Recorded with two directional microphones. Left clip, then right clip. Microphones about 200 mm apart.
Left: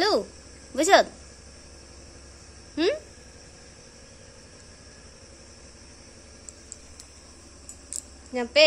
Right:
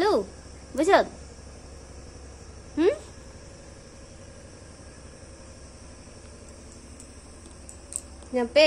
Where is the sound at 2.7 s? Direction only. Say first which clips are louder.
Right 2 dB; 10° left (ahead or behind).